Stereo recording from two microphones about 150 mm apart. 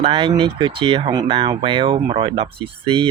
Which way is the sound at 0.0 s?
35° right (ahead or behind).